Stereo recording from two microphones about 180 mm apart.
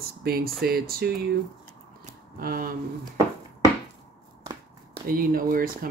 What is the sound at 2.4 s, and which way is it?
Speech, 55° right (ahead or behind).